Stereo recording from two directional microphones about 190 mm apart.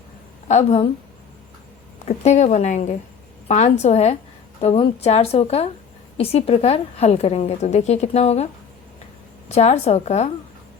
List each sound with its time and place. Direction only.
0.4 s a woman's voice: 35° left (ahead or behind)
2.0 s a woman's voice: 35° left (ahead or behind)
9.5 s a woman's voice: 35° left (ahead or behind)